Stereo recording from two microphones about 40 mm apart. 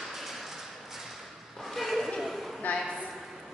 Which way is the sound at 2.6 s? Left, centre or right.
Left.